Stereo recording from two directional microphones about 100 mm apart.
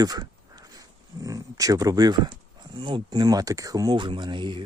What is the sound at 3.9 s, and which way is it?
Speech, 55° right (ahead or behind).